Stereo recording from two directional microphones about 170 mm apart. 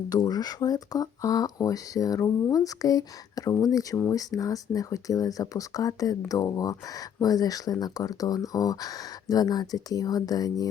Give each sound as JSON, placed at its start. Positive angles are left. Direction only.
{"t": 0.1, "sound": "speech", "side_deg": 25}